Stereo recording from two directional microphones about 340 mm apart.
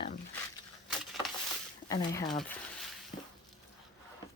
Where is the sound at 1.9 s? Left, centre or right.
Centre.